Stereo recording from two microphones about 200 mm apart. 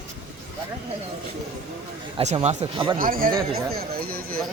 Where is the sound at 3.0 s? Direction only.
45° right (ahead or behind).